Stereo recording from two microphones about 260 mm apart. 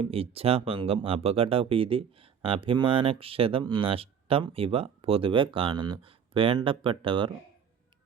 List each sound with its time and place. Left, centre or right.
0.0 s speech: right